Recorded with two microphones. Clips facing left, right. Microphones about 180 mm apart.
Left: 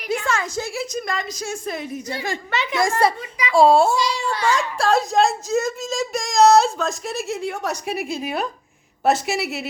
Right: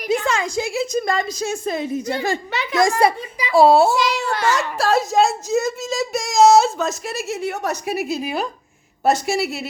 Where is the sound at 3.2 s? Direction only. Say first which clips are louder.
Left 1 dB; 30° right (ahead or behind).